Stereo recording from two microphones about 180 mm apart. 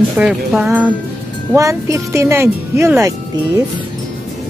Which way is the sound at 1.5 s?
15° right (ahead or behind).